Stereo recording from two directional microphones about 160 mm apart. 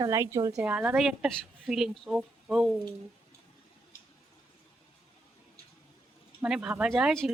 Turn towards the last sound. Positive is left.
turn(degrees=0)  # may be behind; listen again after turning